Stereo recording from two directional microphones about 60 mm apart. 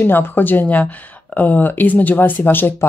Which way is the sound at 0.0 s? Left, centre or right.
Left.